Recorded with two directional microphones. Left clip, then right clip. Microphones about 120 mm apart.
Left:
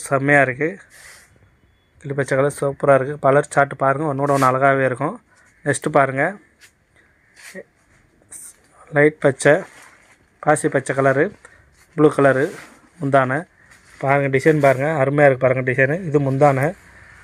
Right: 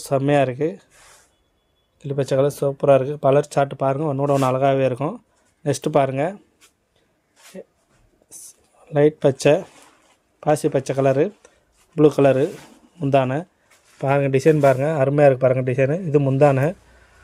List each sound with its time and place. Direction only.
0.0 s speech: 5° right (ahead or behind)
2.0 s speech: centre (ahead or behind)
8.9 s speech: 5° right (ahead or behind)
11.9 s a man's voice: 20° right (ahead or behind)
16.5 s speech: 25° right (ahead or behind)